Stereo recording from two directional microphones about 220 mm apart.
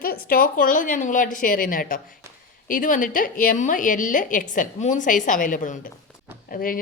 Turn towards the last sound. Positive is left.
turn(degrees=40)  # may be behind; listen again after turning